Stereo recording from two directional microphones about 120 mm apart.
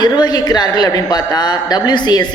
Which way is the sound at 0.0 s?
35° left (ahead or behind).